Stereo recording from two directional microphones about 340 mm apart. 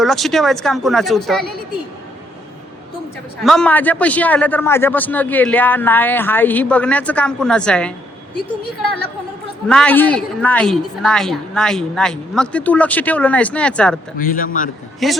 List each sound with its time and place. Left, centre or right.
0.0 s a man's voice: centre
3.4 s a man's voice: centre
9.6 s a man's voice: centre
14.2 s speech: left
15.0 s a man's voice: centre